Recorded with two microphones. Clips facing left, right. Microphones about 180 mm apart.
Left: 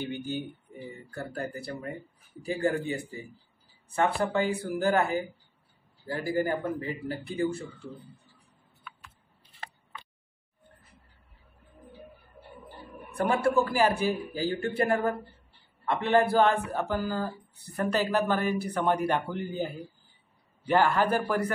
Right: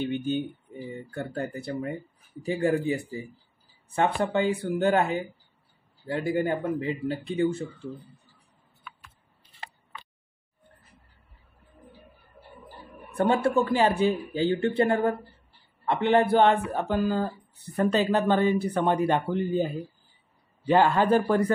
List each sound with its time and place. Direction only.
0.0 s speech: 20° right (ahead or behind)
3.9 s speech: 25° right (ahead or behind)
13.3 s speech: 25° right (ahead or behind)